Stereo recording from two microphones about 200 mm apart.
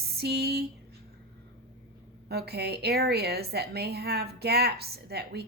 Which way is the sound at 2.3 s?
55° right (ahead or behind).